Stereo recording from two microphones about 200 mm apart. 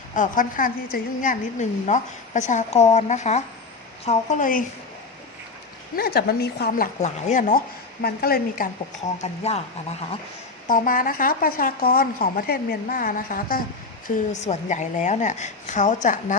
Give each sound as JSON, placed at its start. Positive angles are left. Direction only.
{"t": 0.1, "sound": "a woman's voice", "side_deg": 40}
{"t": 6.0, "sound": "speech", "side_deg": 50}
{"t": 9.2, "sound": "a woman's voice", "side_deg": 30}
{"t": 10.7, "sound": "a woman's voice", "side_deg": 45}